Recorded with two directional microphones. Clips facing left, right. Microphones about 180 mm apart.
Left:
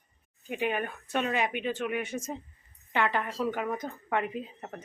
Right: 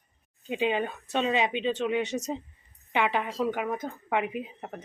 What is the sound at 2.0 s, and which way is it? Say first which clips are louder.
Speech: right 4 dB; 85° right.